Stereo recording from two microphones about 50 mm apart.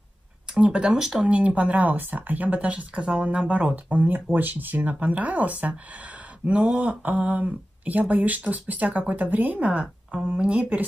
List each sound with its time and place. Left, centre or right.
0.6 s speech: centre
1.3 s speech: right